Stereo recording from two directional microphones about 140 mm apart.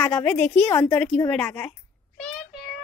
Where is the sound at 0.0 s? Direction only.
10° left (ahead or behind).